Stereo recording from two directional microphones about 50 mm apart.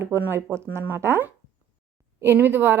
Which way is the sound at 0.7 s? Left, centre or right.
Right.